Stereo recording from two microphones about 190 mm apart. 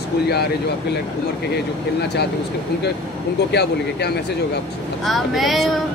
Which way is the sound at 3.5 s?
60° left (ahead or behind).